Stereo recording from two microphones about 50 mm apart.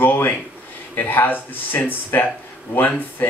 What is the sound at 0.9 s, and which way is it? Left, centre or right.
Speech, left.